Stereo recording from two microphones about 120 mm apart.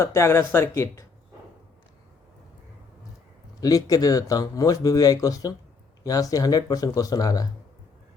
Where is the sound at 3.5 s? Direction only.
30° left (ahead or behind).